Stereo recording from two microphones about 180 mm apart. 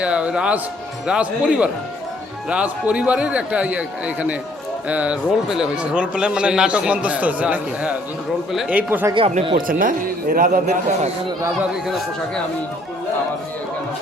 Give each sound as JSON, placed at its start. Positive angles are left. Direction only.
{"t": 0.0, "sound": "a man's voice", "side_deg": -5}
{"t": 9.1, "sound": "speech", "side_deg": -30}
{"t": 9.6, "sound": "a man's voice", "side_deg": -50}